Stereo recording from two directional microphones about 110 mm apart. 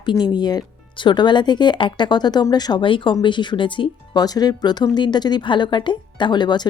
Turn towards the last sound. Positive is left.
turn(degrees=45)  # may be behind; listen again after turning